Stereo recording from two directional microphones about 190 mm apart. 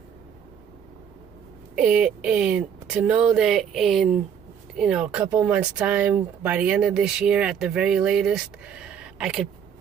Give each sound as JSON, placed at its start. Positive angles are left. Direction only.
{"t": 1.8, "sound": "speech", "side_deg": -5}